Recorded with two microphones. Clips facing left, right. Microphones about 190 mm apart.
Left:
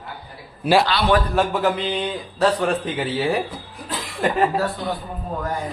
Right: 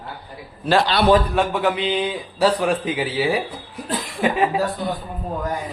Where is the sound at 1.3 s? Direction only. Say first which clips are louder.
Even; centre (ahead or behind).